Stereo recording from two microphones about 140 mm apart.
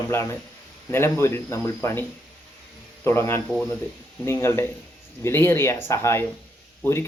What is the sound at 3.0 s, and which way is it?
Speech, 15° left (ahead or behind).